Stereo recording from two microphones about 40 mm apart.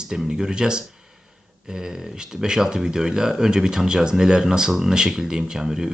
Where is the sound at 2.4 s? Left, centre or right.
Centre.